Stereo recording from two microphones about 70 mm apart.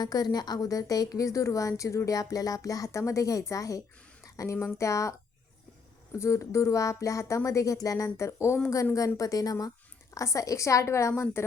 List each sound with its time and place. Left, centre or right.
0.0 s a woman's voice: left
4.2 s a sound: left
4.8 s speech: left
6.1 s a woman's voice: left